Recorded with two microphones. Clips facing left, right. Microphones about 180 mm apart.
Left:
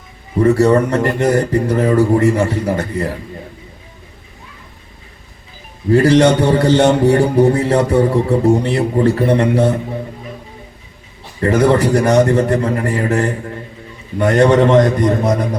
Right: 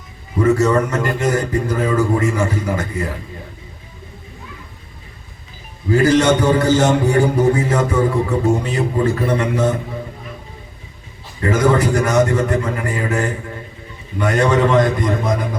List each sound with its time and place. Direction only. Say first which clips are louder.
0.3 s a man's voice: left 3 dB; 35° left (ahead or behind)
5.9 s a man's voice: left 3 dB; 35° left (ahead or behind)
11.6 s a man's voice: left 3 dB; 35° left (ahead or behind)